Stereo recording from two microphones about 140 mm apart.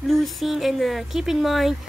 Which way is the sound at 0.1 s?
Centre (ahead or behind).